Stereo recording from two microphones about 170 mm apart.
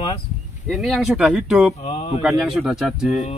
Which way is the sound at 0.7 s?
Centre (ahead or behind).